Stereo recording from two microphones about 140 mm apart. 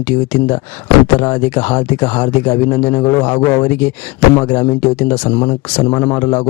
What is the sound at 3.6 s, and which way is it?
A man's voice, 15° left (ahead or behind).